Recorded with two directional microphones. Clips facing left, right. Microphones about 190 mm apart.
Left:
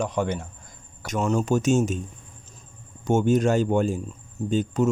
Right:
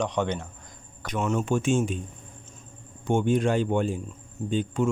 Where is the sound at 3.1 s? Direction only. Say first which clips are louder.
Left 3 dB; 40° left (ahead or behind).